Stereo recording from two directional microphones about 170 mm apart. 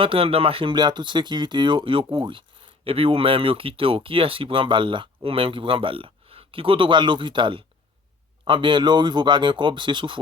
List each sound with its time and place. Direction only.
0.0 s speech: 35° right (ahead or behind)